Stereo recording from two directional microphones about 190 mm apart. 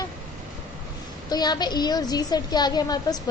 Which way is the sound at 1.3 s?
20° left (ahead or behind).